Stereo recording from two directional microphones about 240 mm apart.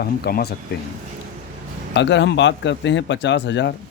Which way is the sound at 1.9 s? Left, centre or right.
Left.